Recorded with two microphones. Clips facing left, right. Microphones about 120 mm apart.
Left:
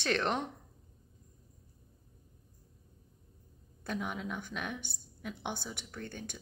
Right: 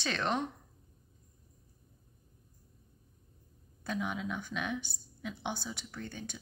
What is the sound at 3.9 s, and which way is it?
A woman's voice, 55° left (ahead or behind).